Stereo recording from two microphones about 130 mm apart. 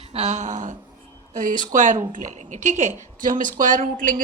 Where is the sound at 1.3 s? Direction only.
90° right.